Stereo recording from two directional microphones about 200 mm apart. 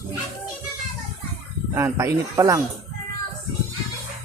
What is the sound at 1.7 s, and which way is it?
Speech, 15° right (ahead or behind).